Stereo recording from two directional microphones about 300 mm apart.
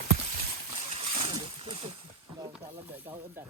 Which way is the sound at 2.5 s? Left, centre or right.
Centre.